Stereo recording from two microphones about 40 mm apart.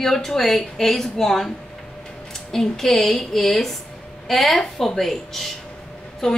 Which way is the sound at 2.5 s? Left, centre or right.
Centre.